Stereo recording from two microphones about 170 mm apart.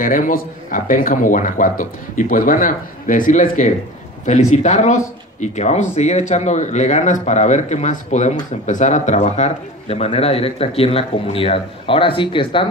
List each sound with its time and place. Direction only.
0.0 s speech: 55° left (ahead or behind); by 12.6 s 30° left (ahead or behind)